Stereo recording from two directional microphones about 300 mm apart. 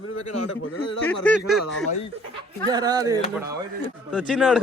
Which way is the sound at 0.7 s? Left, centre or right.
Left.